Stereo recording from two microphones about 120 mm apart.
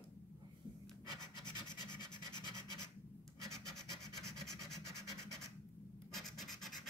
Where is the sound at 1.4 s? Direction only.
35° left (ahead or behind).